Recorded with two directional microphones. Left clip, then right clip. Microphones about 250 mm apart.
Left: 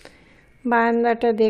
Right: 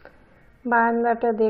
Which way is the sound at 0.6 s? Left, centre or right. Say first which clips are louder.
Left 1 dB; left.